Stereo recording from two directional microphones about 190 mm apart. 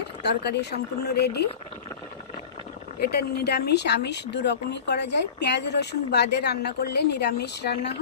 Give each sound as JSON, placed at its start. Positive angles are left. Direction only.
{"t": 0.0, "sound": "speech", "side_deg": 60}
{"t": 3.0, "sound": "speech", "side_deg": 55}